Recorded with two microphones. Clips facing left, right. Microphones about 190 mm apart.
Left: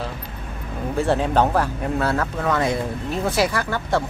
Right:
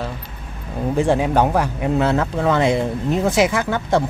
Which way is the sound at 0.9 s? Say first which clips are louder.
Right 2 dB; 10° right (ahead or behind).